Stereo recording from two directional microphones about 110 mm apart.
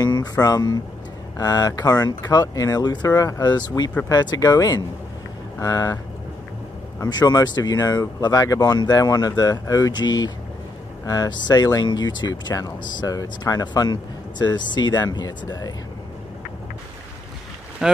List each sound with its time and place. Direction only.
0.0 s speech: 35° left (ahead or behind)
7.0 s speech: 40° left (ahead or behind)
17.8 s speech: 5° right (ahead or behind)